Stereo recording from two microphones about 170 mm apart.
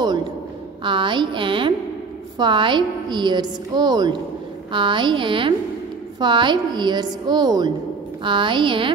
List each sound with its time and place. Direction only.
0.0 s a woman's voice: 25° right (ahead or behind)